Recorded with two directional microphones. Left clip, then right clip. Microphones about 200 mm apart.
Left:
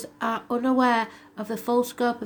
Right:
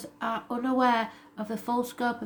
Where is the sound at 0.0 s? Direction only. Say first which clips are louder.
Left 4 dB; 35° left (ahead or behind).